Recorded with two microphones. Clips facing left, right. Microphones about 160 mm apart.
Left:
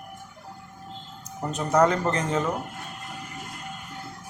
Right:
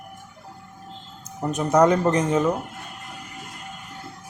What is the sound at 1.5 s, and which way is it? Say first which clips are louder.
Speech: right 3 dB; 15° right (ahead or behind).